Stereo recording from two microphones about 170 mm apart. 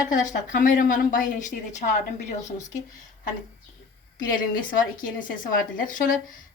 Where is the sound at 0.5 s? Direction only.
50° left (ahead or behind).